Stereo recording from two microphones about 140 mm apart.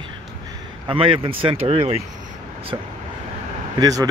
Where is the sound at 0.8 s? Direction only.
40° right (ahead or behind).